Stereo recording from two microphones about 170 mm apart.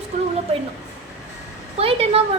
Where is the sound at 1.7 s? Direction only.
35° right (ahead or behind).